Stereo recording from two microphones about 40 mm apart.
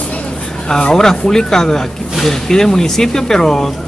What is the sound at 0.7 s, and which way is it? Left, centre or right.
Speech, centre.